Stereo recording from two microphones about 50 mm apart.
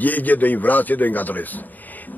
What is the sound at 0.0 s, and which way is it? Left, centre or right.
A man's voice, left.